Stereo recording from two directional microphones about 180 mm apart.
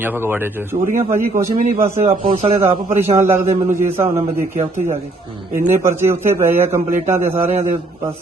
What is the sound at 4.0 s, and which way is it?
Speech, 35° right (ahead or behind).